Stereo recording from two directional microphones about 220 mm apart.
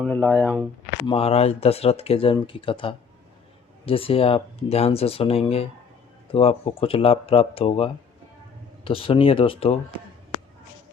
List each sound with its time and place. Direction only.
0.0 s speech: 5° left (ahead or behind)
1.0 s speech: 25° left (ahead or behind)